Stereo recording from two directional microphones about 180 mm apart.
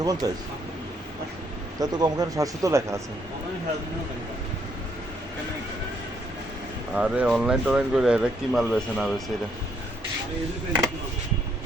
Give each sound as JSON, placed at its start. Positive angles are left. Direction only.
{"t": 0.0, "sound": "speech", "side_deg": -20}
{"t": 1.8, "sound": "speech", "side_deg": -20}
{"t": 6.9, "sound": "speech", "side_deg": -5}